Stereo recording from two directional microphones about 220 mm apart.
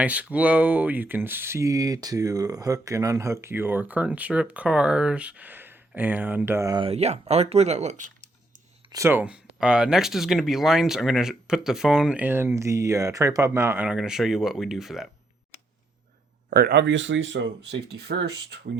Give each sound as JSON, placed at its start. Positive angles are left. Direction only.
{"t": 0.0, "sound": "speech", "side_deg": -5}
{"t": 8.9, "sound": "speech", "side_deg": -10}
{"t": 16.5, "sound": "speech", "side_deg": -45}